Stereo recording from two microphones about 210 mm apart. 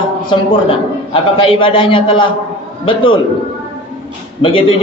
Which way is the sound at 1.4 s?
25° left (ahead or behind).